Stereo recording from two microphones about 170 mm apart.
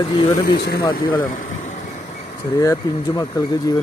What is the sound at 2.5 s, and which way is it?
A man's voice, 20° left (ahead or behind).